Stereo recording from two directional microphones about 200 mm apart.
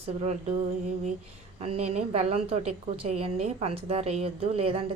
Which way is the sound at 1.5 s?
30° right (ahead or behind).